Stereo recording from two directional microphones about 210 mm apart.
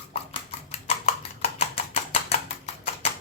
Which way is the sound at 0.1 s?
30° left (ahead or behind).